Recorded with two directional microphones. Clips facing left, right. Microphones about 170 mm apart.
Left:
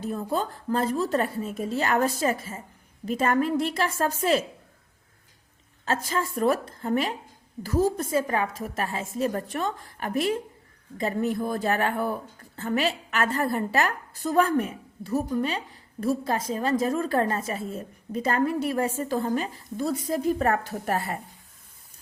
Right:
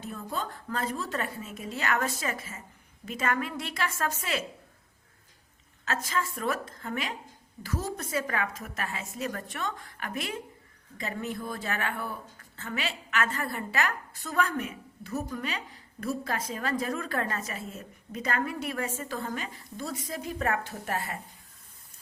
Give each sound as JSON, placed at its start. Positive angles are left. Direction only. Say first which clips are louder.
{"t": 0.0, "sound": "a woman's voice", "louder": "left 7 dB", "side_deg": 35}
{"t": 5.8, "sound": "a woman's voice", "louder": "left 4 dB", "side_deg": 30}
{"t": 11.3, "sound": "a woman's voice", "louder": "left 8 dB", "side_deg": 45}